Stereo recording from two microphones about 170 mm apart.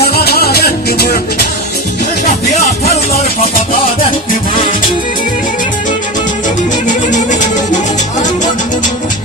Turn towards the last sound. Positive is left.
turn(degrees=45)  # may be behind; listen again after turning